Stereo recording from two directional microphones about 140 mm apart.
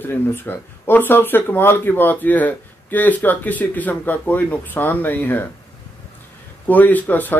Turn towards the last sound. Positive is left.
turn(degrees=15)  # may be behind; listen again after turning